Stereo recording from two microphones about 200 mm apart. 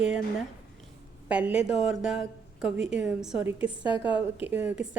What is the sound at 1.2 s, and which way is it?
A woman's voice, 5° right (ahead or behind).